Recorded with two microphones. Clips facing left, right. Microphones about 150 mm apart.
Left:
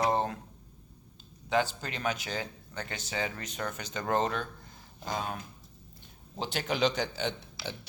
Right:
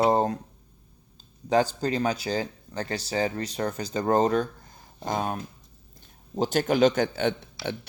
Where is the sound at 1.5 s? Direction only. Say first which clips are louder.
Right 7 dB; 40° right (ahead or behind).